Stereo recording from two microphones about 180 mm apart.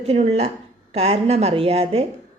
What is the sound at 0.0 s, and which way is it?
Speech, 35° right (ahead or behind).